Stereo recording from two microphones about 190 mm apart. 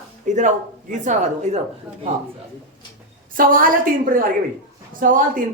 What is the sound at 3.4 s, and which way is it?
A woman's voice, 45° right (ahead or behind).